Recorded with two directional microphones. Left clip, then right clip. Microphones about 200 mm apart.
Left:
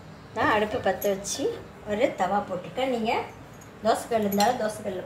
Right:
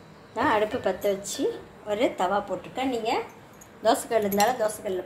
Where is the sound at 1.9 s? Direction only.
30° right (ahead or behind).